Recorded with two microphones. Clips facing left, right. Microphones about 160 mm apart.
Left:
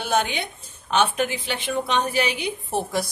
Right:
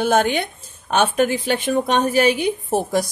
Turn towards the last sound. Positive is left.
turn(degrees=-45)  # may be behind; listen again after turning